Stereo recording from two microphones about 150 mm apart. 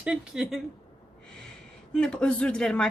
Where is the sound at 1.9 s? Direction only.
5° left (ahead or behind).